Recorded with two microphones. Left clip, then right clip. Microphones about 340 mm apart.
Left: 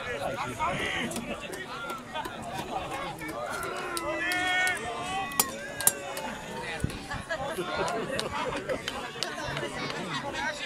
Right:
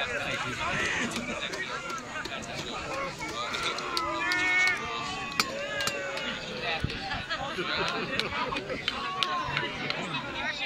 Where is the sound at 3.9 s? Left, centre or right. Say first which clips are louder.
Right 1 dB; left.